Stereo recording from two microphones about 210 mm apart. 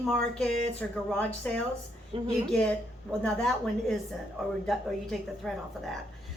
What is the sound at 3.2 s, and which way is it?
A woman's voice, centre (ahead or behind).